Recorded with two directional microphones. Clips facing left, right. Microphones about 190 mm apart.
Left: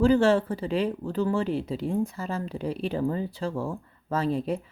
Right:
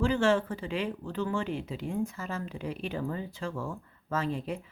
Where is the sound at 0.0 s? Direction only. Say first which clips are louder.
Left 6 dB; 35° left (ahead or behind).